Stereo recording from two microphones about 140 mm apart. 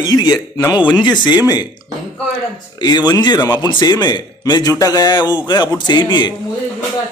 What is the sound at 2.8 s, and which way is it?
A man's voice, 30° left (ahead or behind).